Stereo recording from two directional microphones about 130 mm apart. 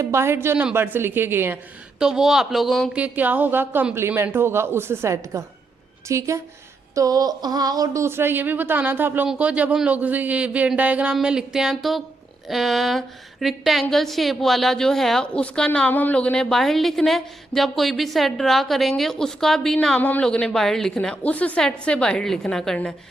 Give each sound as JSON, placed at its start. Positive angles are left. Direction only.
{"t": 0.0, "sound": "speech", "side_deg": -20}
{"t": 2.0, "sound": "a woman's voice", "side_deg": -5}
{"t": 2.9, "sound": "a woman's voice", "side_deg": -10}